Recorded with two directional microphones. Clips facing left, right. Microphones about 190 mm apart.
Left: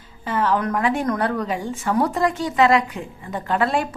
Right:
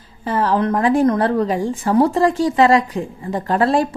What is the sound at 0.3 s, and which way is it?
A woman's voice, 35° right (ahead or behind).